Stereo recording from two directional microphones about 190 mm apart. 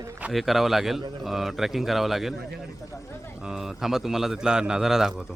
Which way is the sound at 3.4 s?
Centre (ahead or behind).